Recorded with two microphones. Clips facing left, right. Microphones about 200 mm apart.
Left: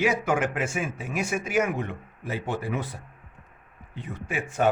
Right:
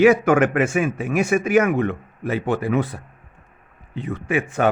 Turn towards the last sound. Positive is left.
turn(degrees=-65)  # may be behind; listen again after turning